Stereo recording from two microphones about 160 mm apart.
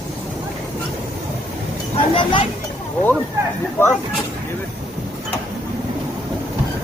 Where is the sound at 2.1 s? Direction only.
30° left (ahead or behind).